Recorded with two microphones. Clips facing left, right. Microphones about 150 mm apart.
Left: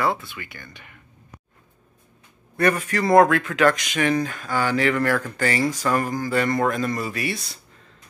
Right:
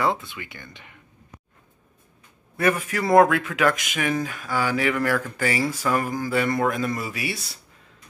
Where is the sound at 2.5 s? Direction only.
5° right (ahead or behind).